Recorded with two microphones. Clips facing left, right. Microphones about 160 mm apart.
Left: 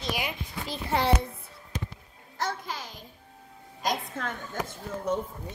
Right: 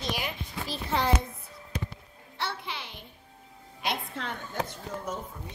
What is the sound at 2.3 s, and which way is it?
Music, 45° left (ahead or behind).